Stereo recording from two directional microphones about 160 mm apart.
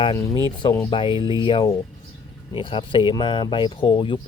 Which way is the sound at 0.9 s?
30° left (ahead or behind).